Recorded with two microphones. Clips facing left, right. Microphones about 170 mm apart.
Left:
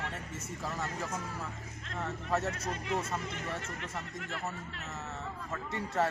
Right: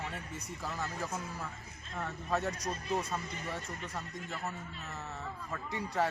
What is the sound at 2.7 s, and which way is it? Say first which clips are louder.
Speech: left 1 dB; 90° left.